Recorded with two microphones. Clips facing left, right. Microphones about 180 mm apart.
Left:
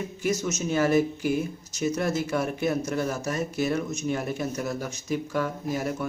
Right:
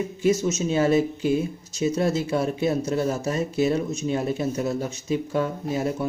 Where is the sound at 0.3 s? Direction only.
30° right (ahead or behind).